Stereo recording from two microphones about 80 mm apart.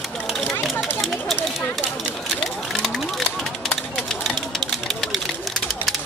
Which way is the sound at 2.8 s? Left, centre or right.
Centre.